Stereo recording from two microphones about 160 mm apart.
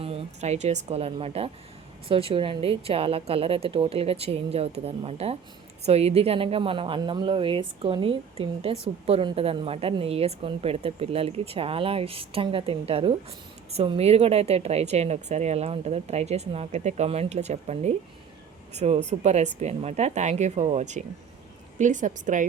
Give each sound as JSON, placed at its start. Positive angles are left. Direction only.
{"t": 0.0, "sound": "a woman's voice", "side_deg": -40}